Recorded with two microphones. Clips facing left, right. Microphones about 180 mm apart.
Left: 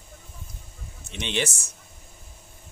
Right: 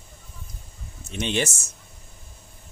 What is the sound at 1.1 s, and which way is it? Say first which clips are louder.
Speech: right 3 dB; 45° right (ahead or behind).